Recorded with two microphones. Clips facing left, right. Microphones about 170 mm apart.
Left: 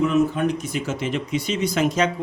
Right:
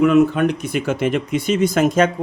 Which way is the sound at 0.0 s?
65° right (ahead or behind).